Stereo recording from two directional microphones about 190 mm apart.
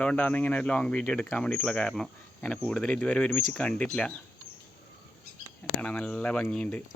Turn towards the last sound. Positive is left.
turn(degrees=5)  # may be behind; listen again after turning